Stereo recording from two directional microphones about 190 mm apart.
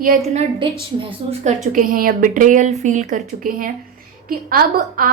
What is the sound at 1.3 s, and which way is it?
A woman's voice, 40° right (ahead or behind).